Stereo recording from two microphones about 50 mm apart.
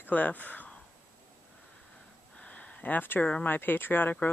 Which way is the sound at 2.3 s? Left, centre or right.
Left.